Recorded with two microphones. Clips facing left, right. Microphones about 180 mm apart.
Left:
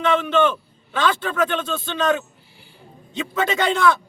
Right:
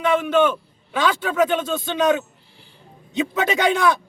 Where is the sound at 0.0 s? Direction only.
10° right (ahead or behind).